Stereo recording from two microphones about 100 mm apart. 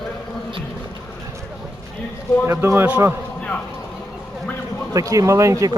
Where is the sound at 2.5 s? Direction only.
25° right (ahead or behind).